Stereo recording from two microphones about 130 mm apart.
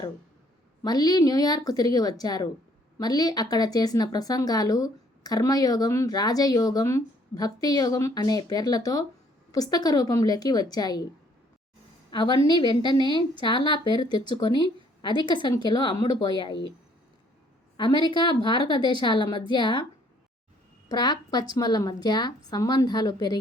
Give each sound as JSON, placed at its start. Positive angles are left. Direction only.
{"t": 0.8, "sound": "speech", "side_deg": 30}
{"t": 12.1, "sound": "speech", "side_deg": 35}
{"t": 17.7, "sound": "speech", "side_deg": 40}
{"t": 20.9, "sound": "speech", "side_deg": 30}